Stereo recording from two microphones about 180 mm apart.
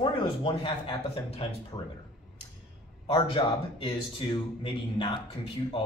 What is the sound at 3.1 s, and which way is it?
A man's voice, 30° left (ahead or behind).